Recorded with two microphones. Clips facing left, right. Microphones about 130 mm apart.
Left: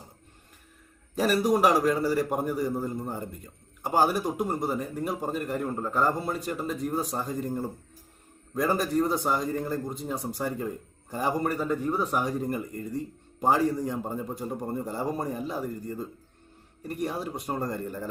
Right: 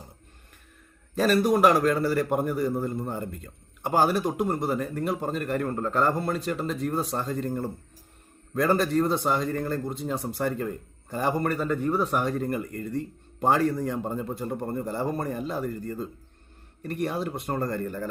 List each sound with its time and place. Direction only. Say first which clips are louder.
1.1 s a man's voice: right 2 dB; 15° left (ahead or behind)
12.1 s a man's voice: right 2 dB; 15° left (ahead or behind)
17.4 s a man's voice: right 2 dB; 15° left (ahead or behind)